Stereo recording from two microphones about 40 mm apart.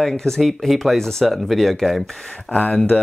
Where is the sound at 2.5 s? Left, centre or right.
Left.